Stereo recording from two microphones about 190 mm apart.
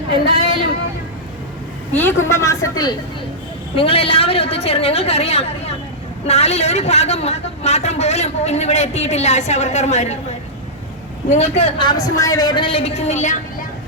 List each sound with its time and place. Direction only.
1.9 s a woman's voice: 10° left (ahead or behind)
3.8 s a man's voice: 30° left (ahead or behind)
11.3 s a man's voice: 35° left (ahead or behind)